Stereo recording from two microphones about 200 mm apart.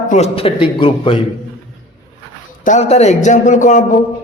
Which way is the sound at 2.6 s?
35° left (ahead or behind).